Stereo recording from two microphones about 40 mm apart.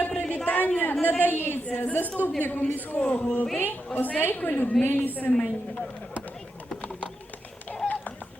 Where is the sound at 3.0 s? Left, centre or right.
Left.